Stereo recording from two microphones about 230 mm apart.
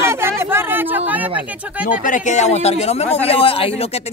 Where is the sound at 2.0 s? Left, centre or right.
Left.